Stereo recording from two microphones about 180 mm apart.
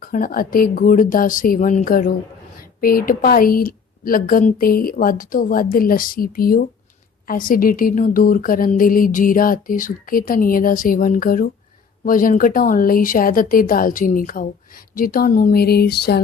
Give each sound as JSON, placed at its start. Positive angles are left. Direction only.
{"t": 0.0, "sound": "speech", "side_deg": 55}